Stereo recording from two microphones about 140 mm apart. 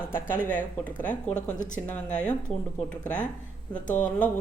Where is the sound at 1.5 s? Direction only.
65° left (ahead or behind).